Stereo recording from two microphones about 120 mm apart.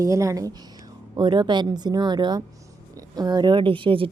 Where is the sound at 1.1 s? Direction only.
40° right (ahead or behind).